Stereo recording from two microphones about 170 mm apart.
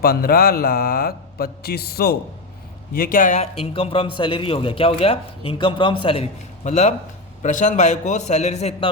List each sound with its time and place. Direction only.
0.0 s a man's voice: 60° left (ahead or behind); by 6.2 s 30° left (ahead or behind)
6.7 s a man's voice: 45° left (ahead or behind)